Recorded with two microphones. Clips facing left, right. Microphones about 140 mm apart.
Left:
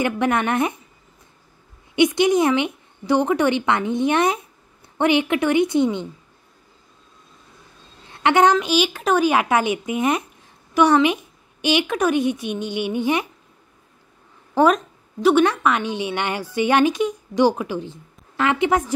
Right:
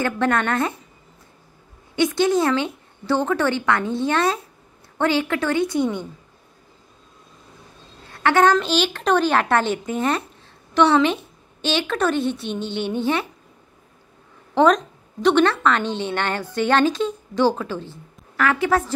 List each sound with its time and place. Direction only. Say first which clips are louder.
0.0 s a woman's voice: left 1 dB; 20° left (ahead or behind)
2.0 s a woman's voice: left 2 dB; 20° left (ahead or behind)
8.1 s a woman's voice: left 1 dB; 20° left (ahead or behind)
14.5 s a woman's voice: even; 5° left (ahead or behind)